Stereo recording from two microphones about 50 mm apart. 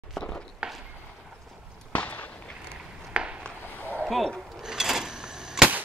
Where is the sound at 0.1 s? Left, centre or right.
Centre.